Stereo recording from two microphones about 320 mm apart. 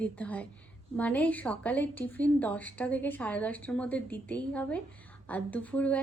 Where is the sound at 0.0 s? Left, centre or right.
Centre.